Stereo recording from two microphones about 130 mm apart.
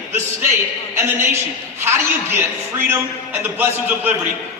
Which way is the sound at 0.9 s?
20° right (ahead or behind).